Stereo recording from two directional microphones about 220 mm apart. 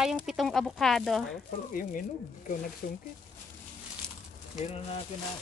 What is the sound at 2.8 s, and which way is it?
Speech, 35° left (ahead or behind).